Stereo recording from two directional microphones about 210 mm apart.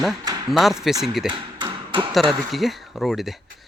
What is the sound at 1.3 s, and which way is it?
Tap, 20° right (ahead or behind).